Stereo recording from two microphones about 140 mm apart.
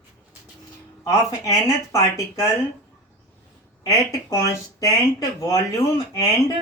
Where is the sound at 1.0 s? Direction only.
25° left (ahead or behind).